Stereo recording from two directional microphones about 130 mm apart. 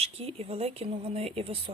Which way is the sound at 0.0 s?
50° right (ahead or behind).